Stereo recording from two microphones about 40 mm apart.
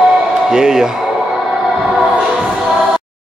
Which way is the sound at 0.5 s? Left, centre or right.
Centre.